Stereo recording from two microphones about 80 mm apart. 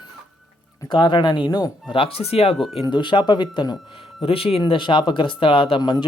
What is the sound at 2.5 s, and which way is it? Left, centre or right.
Speech, centre.